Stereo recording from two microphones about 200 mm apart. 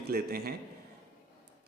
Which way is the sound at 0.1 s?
50° right (ahead or behind).